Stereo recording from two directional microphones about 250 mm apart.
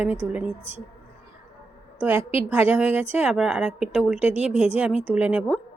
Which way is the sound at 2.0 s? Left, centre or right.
Centre.